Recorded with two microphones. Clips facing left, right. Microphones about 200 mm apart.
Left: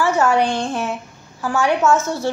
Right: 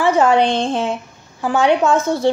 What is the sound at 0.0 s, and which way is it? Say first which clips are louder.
A woman's voice: right 3 dB; 20° right (ahead or behind).